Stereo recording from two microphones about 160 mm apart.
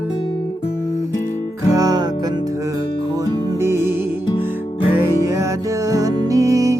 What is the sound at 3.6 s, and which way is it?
Music, 15° right (ahead or behind).